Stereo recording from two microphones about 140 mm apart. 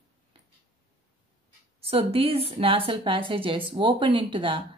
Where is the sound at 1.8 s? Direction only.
45° right (ahead or behind).